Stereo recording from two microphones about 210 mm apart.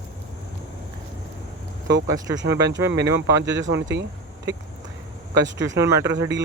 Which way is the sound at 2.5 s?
15° right (ahead or behind).